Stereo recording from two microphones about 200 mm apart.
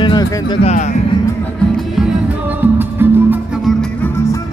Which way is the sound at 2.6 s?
10° right (ahead or behind).